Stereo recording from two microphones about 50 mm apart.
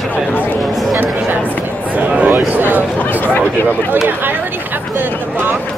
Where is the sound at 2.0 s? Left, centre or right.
Right.